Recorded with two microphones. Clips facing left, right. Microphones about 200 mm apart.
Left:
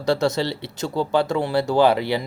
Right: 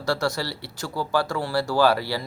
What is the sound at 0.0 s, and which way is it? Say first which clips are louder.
Speech: left 5 dB; 20° left (ahead or behind).